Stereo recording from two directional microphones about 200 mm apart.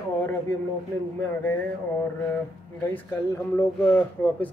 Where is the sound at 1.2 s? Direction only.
10° left (ahead or behind).